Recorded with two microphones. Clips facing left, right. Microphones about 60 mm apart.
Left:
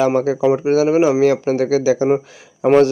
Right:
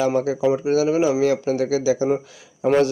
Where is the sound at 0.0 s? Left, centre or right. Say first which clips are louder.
Left 4 dB; left.